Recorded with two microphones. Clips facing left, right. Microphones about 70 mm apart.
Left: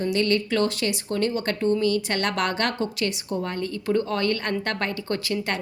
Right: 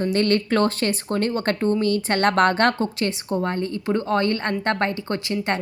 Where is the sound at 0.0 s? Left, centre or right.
Right.